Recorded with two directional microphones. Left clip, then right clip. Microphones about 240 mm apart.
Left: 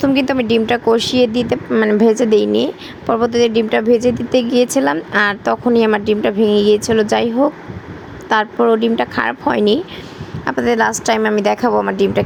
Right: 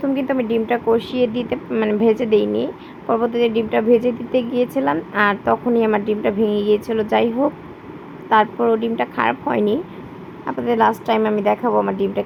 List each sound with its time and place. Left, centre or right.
0.0 s speech: left